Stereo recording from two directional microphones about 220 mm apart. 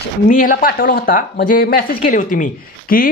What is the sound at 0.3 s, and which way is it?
Speech, 40° left (ahead or behind).